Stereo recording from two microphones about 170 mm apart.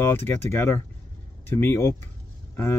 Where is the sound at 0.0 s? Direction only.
15° left (ahead or behind).